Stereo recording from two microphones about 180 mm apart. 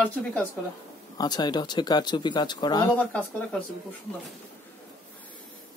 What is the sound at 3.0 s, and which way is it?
Speech, 5° left (ahead or behind).